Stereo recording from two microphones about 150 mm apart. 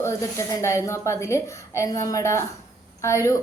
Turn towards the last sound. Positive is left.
turn(degrees=20)  # may be behind; listen again after turning